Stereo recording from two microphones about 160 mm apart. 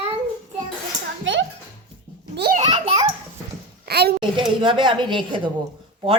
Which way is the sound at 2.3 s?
85° right.